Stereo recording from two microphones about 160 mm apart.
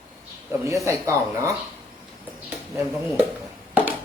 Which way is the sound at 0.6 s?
20° right (ahead or behind).